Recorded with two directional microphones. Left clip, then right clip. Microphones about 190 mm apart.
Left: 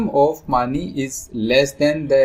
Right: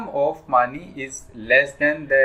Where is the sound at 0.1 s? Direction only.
45° left (ahead or behind).